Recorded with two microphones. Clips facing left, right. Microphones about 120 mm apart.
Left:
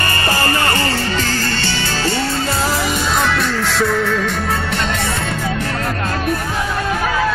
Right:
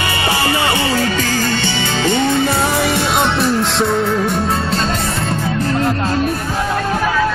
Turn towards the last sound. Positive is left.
turn(degrees=-25)  # may be behind; listen again after turning